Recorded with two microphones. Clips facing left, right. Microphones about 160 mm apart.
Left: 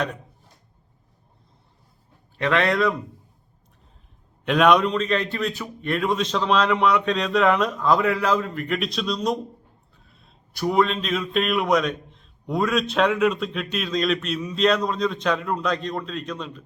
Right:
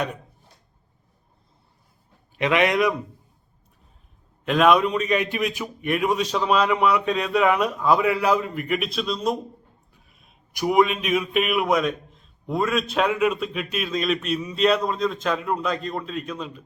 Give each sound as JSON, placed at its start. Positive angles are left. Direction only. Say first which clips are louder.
{"t": 2.3, "sound": "speech", "louder": "right 1 dB", "side_deg": -15}
{"t": 4.4, "sound": "speech", "louder": "even", "side_deg": 0}